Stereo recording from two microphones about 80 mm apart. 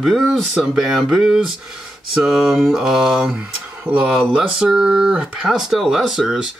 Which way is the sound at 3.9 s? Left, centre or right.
Right.